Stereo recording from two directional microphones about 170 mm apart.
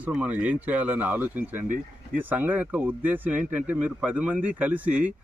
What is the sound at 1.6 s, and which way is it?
Speech, 50° right (ahead or behind).